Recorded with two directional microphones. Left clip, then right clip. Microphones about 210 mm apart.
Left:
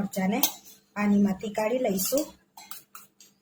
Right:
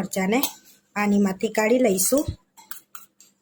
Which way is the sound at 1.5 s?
50° right (ahead or behind).